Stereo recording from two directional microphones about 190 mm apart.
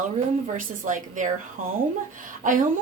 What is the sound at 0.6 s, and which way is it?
Speech, 40° right (ahead or behind).